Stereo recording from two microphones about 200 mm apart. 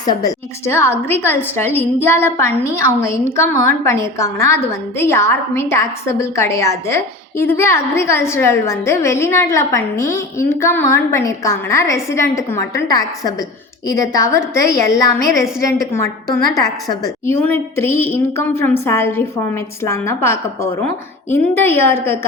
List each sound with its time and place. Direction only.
0.0 s a woman's voice: 20° left (ahead or behind)
17.2 s a woman's voice: 10° left (ahead or behind)